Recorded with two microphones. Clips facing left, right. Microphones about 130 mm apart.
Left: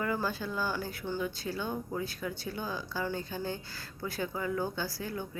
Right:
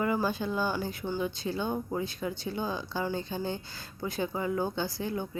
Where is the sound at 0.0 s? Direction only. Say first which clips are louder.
Right 4 dB; 20° right (ahead or behind).